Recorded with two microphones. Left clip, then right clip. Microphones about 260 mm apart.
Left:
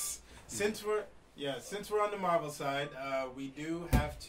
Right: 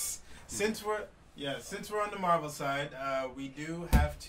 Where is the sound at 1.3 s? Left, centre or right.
Right.